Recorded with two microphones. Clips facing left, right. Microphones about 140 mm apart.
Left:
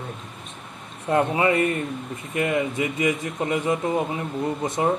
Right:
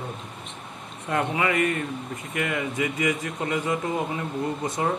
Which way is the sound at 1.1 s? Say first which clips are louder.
Left 4 dB; 30° left (ahead or behind).